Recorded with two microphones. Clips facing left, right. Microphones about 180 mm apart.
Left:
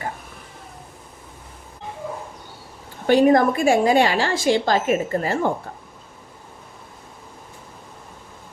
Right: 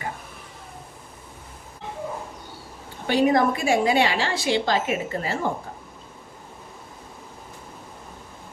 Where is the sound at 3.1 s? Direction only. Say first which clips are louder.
Left 5 dB; 50° left (ahead or behind).